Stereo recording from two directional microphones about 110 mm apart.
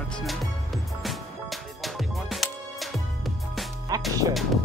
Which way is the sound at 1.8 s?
Centre (ahead or behind).